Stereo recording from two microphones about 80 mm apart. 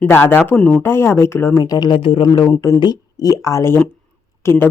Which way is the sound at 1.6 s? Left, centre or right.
Left.